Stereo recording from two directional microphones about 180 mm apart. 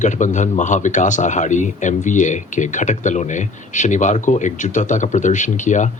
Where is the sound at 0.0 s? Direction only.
45° left (ahead or behind).